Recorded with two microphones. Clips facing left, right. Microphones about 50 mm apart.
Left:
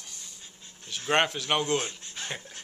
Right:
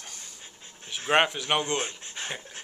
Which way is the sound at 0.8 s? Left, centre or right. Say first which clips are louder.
Right 2 dB; centre.